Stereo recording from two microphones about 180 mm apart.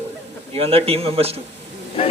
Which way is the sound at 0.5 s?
30° right (ahead or behind).